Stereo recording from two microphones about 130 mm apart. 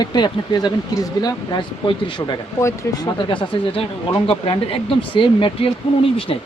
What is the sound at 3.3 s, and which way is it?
Speech, 40° left (ahead or behind).